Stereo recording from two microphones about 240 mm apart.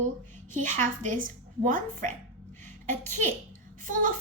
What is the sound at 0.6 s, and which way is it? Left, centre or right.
A woman's voice, right.